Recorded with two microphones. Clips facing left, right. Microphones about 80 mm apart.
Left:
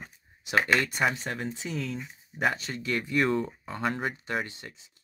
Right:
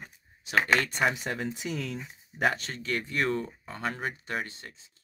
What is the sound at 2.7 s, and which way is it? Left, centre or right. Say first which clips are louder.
Speech: left 3 dB; centre.